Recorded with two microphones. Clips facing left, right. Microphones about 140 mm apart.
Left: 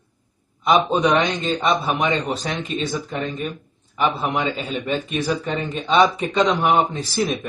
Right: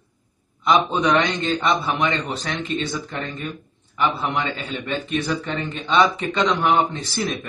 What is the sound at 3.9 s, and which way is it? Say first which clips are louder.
A man's voice: left 1 dB; 5° left (ahead or behind).